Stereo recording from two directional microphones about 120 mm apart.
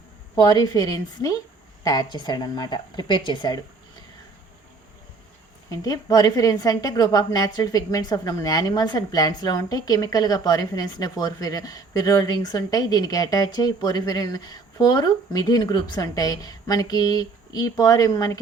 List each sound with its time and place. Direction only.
0.3 s a woman's voice: 30° left (ahead or behind)
5.6 s a woman's voice: 30° left (ahead or behind)